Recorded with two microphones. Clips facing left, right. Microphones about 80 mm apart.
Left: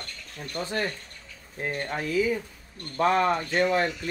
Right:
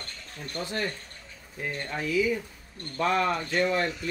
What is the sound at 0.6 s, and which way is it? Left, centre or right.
Speech, left.